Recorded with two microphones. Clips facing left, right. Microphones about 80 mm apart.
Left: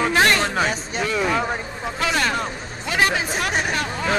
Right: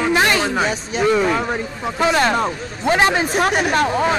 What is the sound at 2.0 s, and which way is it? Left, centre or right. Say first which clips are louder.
A man's voice: right 6 dB; right.